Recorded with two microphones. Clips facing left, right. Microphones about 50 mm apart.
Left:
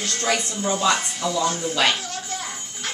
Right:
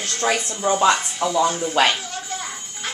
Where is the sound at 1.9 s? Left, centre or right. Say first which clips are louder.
Right 1 dB; centre.